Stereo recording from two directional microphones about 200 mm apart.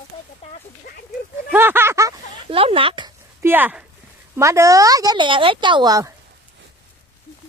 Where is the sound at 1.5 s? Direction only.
10° right (ahead or behind).